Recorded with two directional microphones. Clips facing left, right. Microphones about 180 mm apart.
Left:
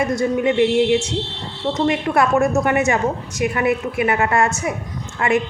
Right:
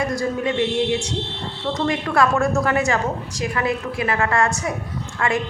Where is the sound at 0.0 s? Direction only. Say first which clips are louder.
Left 4 dB; 20° left (ahead or behind).